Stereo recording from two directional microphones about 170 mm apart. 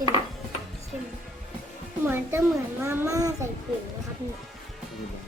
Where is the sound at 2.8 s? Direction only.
15° right (ahead or behind).